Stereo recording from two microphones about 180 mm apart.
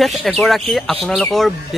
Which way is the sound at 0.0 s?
Centre (ahead or behind).